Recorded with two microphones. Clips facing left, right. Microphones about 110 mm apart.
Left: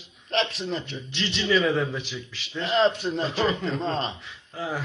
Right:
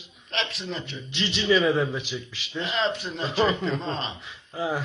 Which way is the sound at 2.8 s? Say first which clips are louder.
Left 6 dB; 40° left (ahead or behind).